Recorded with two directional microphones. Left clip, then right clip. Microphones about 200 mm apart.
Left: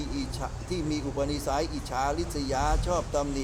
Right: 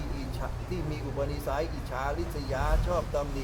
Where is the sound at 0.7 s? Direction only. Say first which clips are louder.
Left 7 dB; 55° left (ahead or behind).